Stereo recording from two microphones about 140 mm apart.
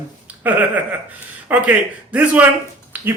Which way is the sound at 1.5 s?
10° right (ahead or behind).